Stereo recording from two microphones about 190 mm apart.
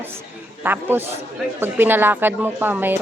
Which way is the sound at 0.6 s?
10° right (ahead or behind).